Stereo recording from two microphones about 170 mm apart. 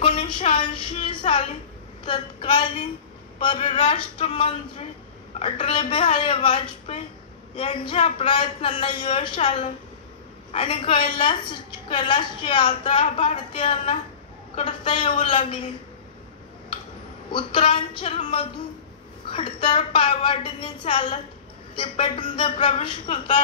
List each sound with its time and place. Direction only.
0.0 s a sound: 30° left (ahead or behind)
2.0 s a woman's voice: 30° left (ahead or behind)
17.3 s a woman's voice: 30° left (ahead or behind)